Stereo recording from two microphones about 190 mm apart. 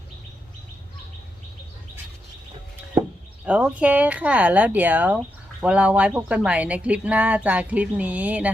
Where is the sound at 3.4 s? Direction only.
5° right (ahead or behind).